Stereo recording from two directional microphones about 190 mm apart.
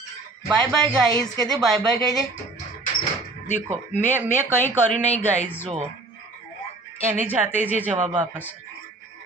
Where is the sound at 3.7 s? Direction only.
10° right (ahead or behind).